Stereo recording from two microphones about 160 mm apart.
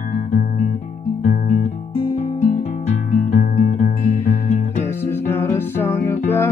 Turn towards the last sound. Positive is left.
turn(degrees=15)  # may be behind; listen again after turning